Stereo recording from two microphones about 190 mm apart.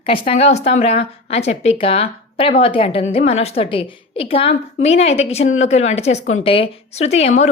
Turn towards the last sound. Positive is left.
turn(degrees=35)  # may be behind; listen again after turning